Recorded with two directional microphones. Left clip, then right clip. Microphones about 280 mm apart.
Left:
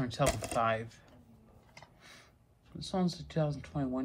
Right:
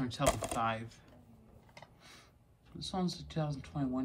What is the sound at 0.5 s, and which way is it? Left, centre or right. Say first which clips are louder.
Speech: left 4 dB; centre.